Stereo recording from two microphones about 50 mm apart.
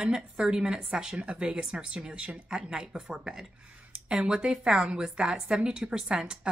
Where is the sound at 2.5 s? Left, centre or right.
Centre.